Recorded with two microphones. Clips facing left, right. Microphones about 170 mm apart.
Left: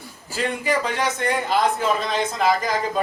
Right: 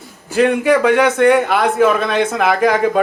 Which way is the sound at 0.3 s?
65° right (ahead or behind).